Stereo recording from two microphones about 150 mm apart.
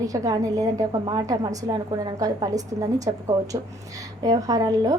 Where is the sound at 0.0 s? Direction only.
25° right (ahead or behind).